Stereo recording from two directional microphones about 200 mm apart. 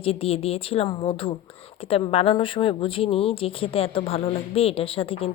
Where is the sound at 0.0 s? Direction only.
30° left (ahead or behind).